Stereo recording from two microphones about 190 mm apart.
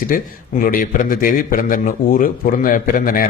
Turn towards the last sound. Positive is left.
turn(degrees=45)  # may be behind; listen again after turning